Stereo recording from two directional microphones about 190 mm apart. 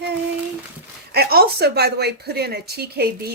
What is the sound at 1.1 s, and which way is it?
A woman's voice, 55° right (ahead or behind).